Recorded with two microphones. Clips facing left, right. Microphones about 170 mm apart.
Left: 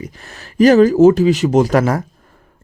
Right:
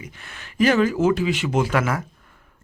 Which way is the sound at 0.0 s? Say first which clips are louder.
Left 8 dB; 35° left (ahead or behind).